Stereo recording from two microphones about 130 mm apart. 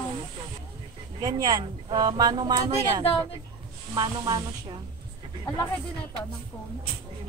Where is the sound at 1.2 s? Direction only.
35° right (ahead or behind).